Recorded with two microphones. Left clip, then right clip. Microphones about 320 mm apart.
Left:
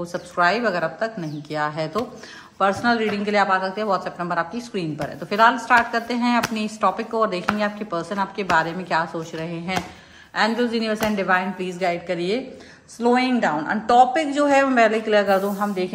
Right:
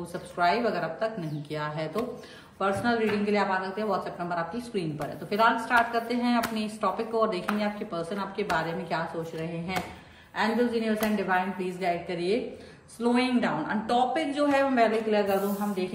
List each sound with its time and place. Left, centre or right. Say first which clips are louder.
0.0 s speech: left 6 dB; left